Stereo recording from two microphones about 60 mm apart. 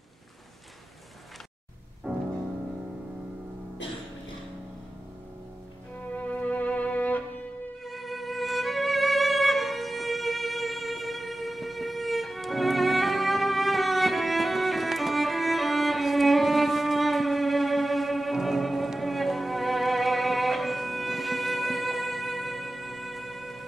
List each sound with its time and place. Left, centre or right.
2.1 s music: right
6.1 s music: left
7.8 s music: centre